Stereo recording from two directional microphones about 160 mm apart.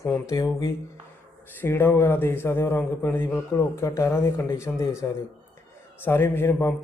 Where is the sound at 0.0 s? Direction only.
20° left (ahead or behind).